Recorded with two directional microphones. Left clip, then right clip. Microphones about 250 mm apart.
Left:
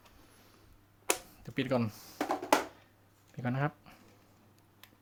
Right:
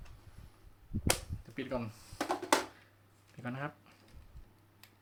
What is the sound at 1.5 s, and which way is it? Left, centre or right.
Speech, left.